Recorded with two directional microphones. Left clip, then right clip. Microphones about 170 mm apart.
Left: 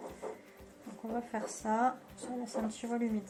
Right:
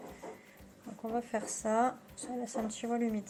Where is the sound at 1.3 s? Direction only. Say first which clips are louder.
Left 1 dB; 70° right (ahead or behind).